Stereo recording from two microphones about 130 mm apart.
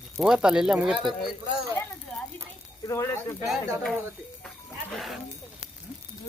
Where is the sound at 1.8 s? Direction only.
20° left (ahead or behind).